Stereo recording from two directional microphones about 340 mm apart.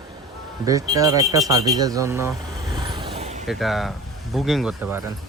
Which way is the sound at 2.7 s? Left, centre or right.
Centre.